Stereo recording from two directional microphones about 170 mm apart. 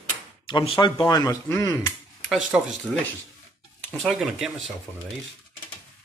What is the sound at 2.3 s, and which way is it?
Speech, centre (ahead or behind).